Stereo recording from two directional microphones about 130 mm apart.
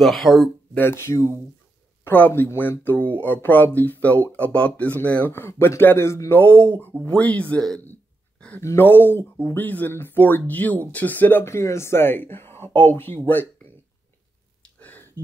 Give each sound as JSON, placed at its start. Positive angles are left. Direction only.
{"t": 0.0, "sound": "speech", "side_deg": 0}
{"t": 0.7, "sound": "speech", "side_deg": 20}
{"t": 14.8, "sound": "a sound", "side_deg": 10}